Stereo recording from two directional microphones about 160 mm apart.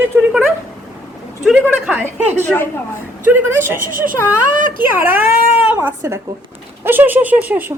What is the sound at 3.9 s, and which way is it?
Speech, 60° right (ahead or behind).